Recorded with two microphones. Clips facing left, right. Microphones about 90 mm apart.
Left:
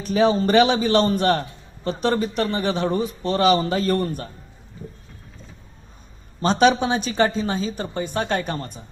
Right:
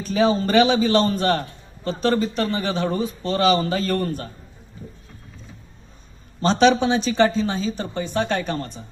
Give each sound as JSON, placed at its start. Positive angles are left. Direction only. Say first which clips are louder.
{"t": 0.0, "sound": "a man's voice", "louder": "left 1 dB", "side_deg": 20}
{"t": 6.4, "sound": "speech", "louder": "right 1 dB", "side_deg": 10}